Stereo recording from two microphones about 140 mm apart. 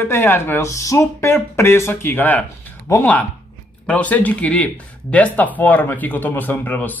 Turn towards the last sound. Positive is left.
turn(degrees=10)  # may be behind; listen again after turning